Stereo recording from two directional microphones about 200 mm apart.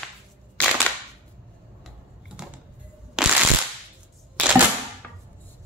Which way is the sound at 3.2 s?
5° right (ahead or behind).